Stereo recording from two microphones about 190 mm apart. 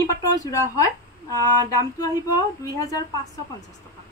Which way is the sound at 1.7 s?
20° left (ahead or behind).